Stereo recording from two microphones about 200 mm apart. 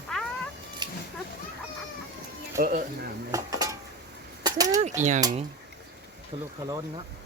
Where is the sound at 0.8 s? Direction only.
20° right (ahead or behind).